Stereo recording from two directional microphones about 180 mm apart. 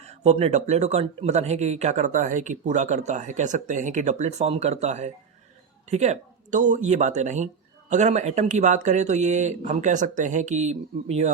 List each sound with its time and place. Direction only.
0.0 s speech: 35° right (ahead or behind)